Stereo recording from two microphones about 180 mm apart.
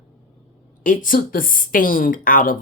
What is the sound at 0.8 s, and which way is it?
Speech, 50° left (ahead or behind).